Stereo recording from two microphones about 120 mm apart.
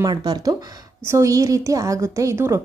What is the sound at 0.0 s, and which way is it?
A woman's voice, 35° right (ahead or behind).